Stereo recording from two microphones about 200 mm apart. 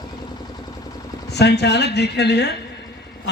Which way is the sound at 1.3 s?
55° left (ahead or behind).